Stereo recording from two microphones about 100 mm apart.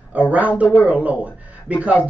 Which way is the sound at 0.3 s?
15° right (ahead or behind).